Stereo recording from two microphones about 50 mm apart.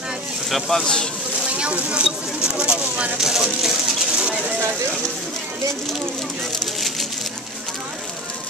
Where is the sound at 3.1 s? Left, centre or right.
Centre.